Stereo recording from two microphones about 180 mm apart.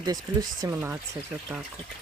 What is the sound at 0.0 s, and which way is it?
Speech, 20° right (ahead or behind).